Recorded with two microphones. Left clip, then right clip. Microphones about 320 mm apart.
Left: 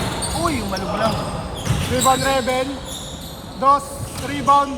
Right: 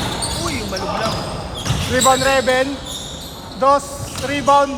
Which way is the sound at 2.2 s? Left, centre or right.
Right.